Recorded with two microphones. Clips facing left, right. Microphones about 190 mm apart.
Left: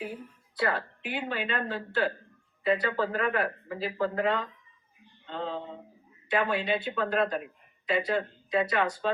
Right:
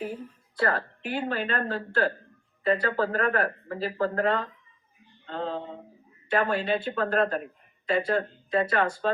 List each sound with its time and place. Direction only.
0.6 s speech: 45° right (ahead or behind)